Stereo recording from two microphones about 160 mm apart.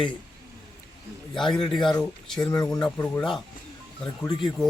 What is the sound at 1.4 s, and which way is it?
Speech, 30° left (ahead or behind).